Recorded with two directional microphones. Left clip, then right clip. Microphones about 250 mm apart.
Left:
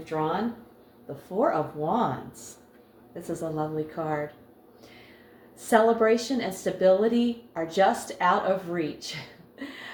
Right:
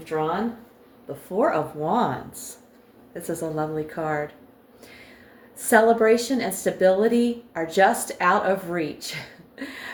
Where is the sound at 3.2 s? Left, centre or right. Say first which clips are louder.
Right 3 dB; right.